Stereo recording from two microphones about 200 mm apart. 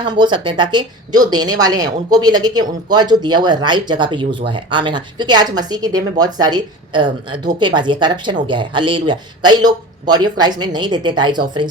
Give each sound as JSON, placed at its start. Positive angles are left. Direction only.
{"t": 0.0, "sound": "speech", "side_deg": -20}